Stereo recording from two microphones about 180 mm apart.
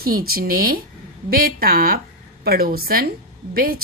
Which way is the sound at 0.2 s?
55° right (ahead or behind).